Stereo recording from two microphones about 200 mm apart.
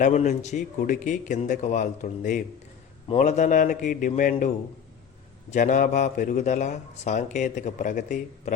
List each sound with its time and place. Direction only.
0.0 s speech: 35° left (ahead or behind)
5.5 s speech: 40° left (ahead or behind)